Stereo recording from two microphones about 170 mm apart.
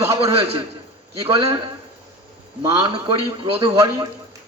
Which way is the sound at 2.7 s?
25° right (ahead or behind).